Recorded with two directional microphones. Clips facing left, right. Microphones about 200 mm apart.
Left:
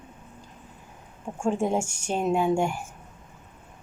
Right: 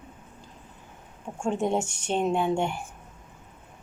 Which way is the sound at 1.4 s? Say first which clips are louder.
Left 1 dB; 5° left (ahead or behind).